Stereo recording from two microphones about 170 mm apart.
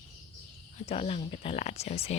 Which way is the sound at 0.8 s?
35° left (ahead or behind).